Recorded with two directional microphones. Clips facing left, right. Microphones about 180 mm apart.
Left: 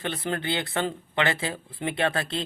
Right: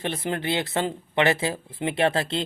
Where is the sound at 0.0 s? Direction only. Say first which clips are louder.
Right 2 dB; 20° right (ahead or behind).